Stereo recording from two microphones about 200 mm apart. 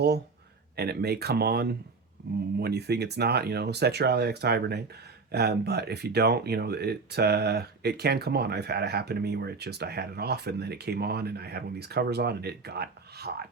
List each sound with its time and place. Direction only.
0.8 s speech: 55° right (ahead or behind)